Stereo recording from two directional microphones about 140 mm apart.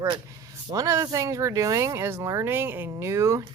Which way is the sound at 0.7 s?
25° right (ahead or behind).